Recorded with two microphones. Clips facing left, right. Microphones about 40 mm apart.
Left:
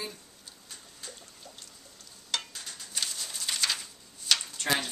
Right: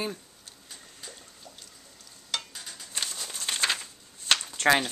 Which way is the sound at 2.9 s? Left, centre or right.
Right.